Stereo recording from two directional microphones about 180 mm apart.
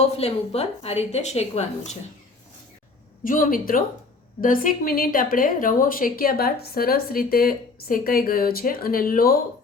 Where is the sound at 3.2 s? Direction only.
50° left (ahead or behind).